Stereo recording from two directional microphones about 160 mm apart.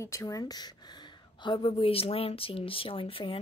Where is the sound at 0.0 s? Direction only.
20° left (ahead or behind).